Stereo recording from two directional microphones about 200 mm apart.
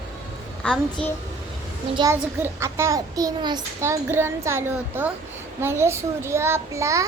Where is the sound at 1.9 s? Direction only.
15° right (ahead or behind).